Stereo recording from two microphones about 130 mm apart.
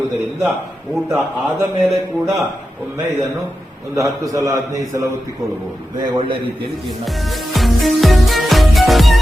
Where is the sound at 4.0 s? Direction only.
25° right (ahead or behind).